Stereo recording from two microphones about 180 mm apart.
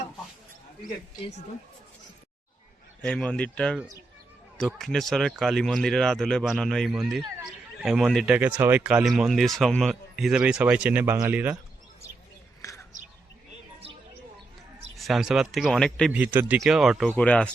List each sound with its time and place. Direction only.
3.0 s speech: 5° left (ahead or behind)
12.6 s a sound: 15° left (ahead or behind)
14.9 s speech: centre (ahead or behind)
16.1 s speech: 10° right (ahead or behind); by 17.5 s 5° left (ahead or behind)